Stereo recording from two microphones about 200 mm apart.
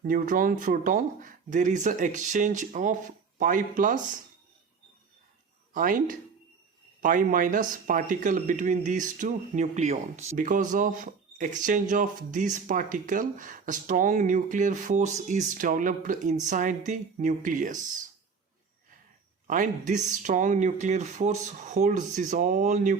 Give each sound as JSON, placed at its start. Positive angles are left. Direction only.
{"t": 0.0, "sound": "speech", "side_deg": -40}
{"t": 5.7, "sound": "speech", "side_deg": -45}
{"t": 19.5, "sound": "speech", "side_deg": -40}